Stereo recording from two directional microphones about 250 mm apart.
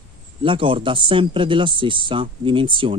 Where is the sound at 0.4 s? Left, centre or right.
Centre.